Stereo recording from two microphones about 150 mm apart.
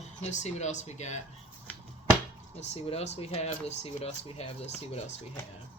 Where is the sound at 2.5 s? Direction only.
45° left (ahead or behind).